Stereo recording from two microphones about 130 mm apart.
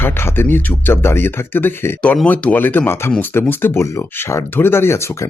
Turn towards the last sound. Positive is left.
turn(degrees=20)  # may be behind; listen again after turning